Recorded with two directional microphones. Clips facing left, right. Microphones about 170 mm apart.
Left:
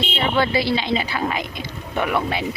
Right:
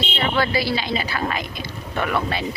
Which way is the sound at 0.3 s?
25° left (ahead or behind).